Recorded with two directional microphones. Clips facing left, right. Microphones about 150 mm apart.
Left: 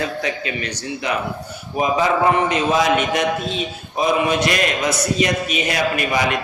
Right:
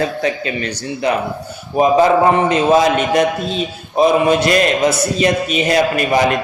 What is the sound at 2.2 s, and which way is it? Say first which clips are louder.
A man's voice: right 4 dB; 35° right (ahead or behind).